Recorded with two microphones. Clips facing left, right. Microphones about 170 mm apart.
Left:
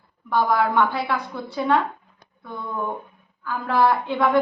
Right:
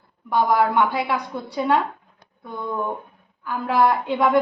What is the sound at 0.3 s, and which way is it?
Speech, 15° right (ahead or behind).